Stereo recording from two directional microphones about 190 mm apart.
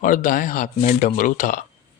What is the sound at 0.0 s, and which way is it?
Speech, 45° left (ahead or behind).